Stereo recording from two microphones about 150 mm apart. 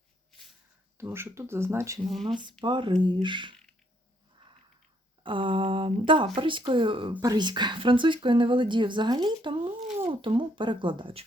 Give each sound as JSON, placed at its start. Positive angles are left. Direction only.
{"t": 0.9, "sound": "speech", "side_deg": -15}
{"t": 2.2, "sound": "speech", "side_deg": -30}
{"t": 5.2, "sound": "speech", "side_deg": -35}